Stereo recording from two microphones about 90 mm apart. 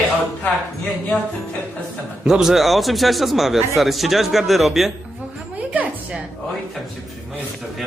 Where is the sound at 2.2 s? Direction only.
5° right (ahead or behind).